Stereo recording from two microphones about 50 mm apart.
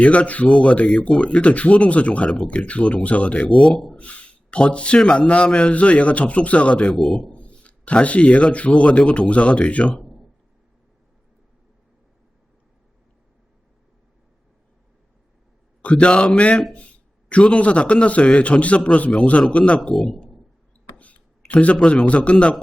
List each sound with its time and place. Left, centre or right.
0.0 s a man's voice: left
6.9 s a man's voice: centre
7.3 s a man's voice: left
15.8 s a man's voice: left
21.0 s a sound: left
21.8 s a man's voice: centre
22.0 s a man's voice: left